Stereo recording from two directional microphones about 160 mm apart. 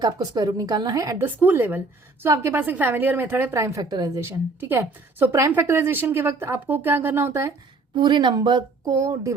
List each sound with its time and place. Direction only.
0.0 s a woman's voice: 25° right (ahead or behind)
7.9 s a woman's voice: 30° right (ahead or behind)